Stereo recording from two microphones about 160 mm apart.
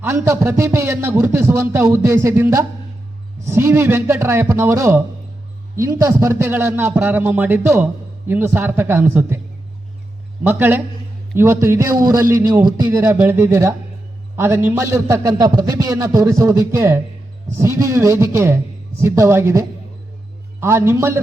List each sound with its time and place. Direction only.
0.0 s speech: 15° right (ahead or behind)
10.4 s a man's voice: 10° right (ahead or behind)